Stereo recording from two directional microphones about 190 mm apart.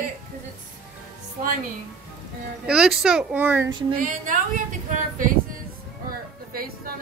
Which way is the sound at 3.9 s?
45° right (ahead or behind).